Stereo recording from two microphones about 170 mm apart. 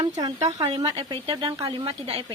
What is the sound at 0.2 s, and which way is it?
Speech, 20° right (ahead or behind).